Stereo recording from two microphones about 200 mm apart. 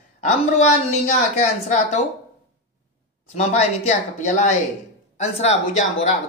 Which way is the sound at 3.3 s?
35° left (ahead or behind).